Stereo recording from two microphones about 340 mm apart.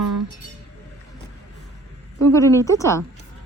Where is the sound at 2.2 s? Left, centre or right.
Centre.